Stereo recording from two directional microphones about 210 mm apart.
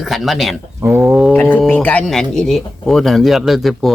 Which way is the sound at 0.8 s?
10° right (ahead or behind).